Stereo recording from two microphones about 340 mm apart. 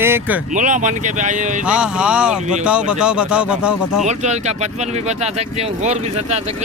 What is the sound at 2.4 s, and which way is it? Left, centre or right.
Speech, right.